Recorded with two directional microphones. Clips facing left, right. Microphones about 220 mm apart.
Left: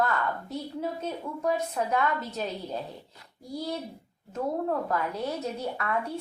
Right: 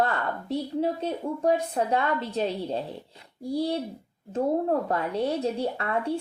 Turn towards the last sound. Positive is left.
turn(degrees=-30)  # may be behind; listen again after turning